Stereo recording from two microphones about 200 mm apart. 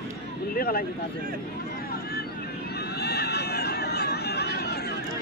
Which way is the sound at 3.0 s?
55° left (ahead or behind).